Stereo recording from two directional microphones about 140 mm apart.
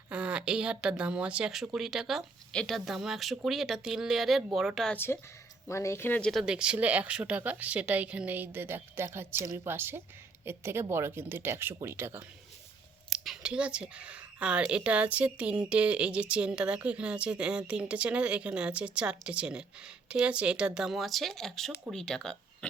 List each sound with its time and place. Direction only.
0.1 s speech: 10° right (ahead or behind)
4.9 s speech: 15° left (ahead or behind)
6.4 s speech: 5° right (ahead or behind)
13.1 s speech: centre (ahead or behind)